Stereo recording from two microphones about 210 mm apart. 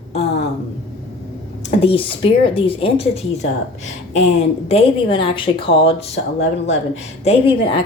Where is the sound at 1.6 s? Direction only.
25° left (ahead or behind).